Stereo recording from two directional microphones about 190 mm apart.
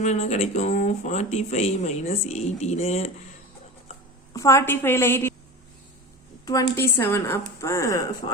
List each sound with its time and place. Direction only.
0.0 s speech: 35° left (ahead or behind)
4.4 s a woman's voice: 15° left (ahead or behind)
6.4 s a woman's voice: 20° left (ahead or behind)